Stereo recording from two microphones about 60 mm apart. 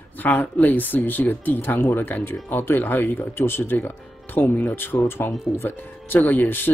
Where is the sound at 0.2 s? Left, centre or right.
Left.